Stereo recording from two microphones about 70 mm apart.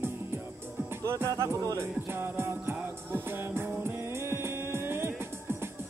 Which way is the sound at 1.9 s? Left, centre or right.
Right.